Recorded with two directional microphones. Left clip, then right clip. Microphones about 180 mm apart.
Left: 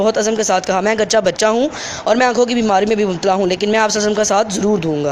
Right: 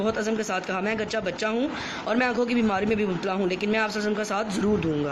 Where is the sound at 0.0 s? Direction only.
45° left (ahead or behind).